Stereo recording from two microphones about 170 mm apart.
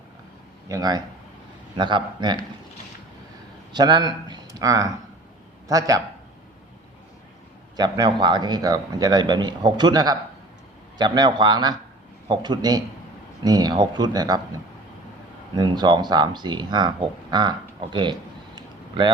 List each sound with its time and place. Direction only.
0.7 s a man's voice: 25° right (ahead or behind)
3.7 s a man's voice: 25° right (ahead or behind)
7.8 s a man's voice: 25° right (ahead or behind)
15.5 s a man's voice: 25° right (ahead or behind)
18.5 s a sound: 25° right (ahead or behind)